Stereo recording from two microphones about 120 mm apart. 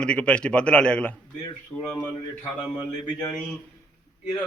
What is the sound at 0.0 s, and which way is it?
A man's voice, 10° left (ahead or behind).